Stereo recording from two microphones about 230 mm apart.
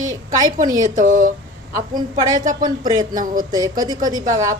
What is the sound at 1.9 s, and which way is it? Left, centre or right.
A woman's voice, centre.